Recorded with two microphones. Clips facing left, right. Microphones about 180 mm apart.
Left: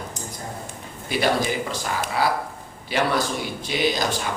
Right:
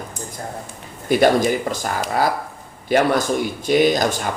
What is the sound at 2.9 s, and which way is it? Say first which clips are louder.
Speech: right 6 dB; 45° right (ahead or behind).